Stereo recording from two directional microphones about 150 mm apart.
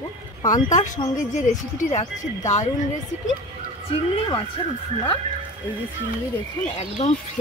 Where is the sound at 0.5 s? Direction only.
55° left (ahead or behind).